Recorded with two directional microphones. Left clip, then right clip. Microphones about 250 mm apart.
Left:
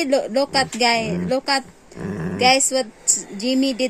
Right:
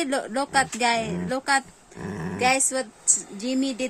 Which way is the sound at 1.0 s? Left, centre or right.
Centre.